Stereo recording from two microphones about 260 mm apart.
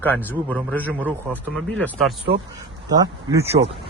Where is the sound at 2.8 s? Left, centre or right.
Centre.